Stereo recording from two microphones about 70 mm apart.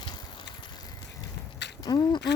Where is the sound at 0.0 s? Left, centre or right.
Left.